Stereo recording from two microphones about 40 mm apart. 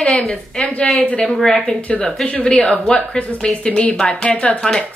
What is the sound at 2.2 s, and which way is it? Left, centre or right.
A woman's voice, left.